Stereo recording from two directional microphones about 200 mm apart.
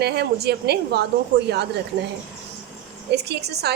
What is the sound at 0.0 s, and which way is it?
A woman's voice, 55° right (ahead or behind).